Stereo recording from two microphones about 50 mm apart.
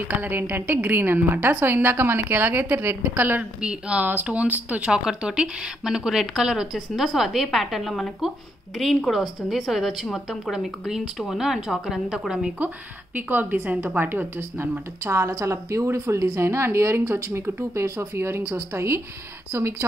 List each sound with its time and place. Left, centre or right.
0.1 s a woman's voice: right
4.9 s a woman's voice: centre
12.5 s a woman's voice: right
15.0 s a woman's voice: right